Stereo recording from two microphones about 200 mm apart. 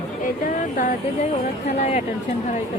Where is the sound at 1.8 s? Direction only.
35° left (ahead or behind).